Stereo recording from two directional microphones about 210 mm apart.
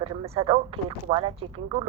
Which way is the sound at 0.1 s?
25° right (ahead or behind).